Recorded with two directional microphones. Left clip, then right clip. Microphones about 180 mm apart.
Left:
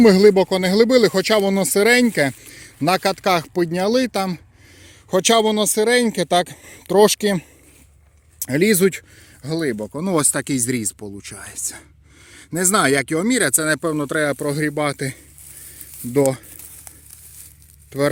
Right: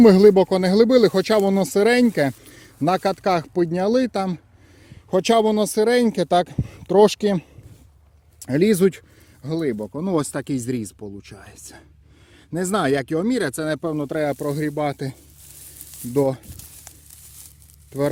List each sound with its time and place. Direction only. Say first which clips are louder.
0.0 s speech: even; 15° right (ahead or behind)
9.4 s speech: left 2 dB; 5° left (ahead or behind)